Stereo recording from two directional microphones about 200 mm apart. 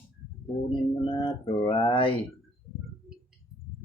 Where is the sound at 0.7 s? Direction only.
25° left (ahead or behind).